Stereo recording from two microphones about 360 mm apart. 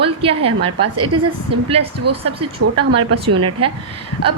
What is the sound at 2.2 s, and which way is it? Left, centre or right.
A woman's voice, centre.